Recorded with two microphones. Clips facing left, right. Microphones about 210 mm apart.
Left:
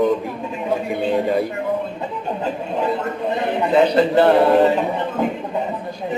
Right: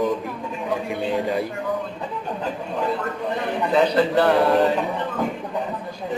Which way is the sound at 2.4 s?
25° left (ahead or behind).